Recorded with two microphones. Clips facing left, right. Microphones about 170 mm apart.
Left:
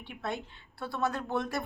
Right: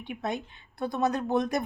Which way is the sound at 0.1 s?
15° right (ahead or behind).